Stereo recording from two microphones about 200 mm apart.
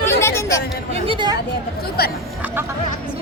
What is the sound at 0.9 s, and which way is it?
Speech, 25° right (ahead or behind).